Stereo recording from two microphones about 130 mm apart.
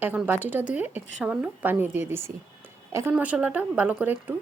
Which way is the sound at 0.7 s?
10° right (ahead or behind).